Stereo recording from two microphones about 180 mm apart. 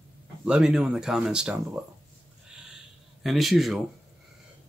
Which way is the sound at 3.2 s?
Centre (ahead or behind).